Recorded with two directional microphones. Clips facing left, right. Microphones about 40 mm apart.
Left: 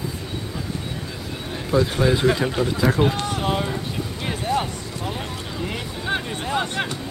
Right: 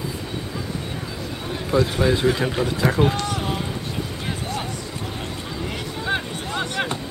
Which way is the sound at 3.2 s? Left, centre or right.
Left.